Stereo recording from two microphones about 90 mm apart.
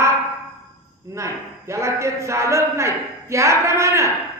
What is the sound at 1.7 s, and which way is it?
A woman's voice, 30° right (ahead or behind).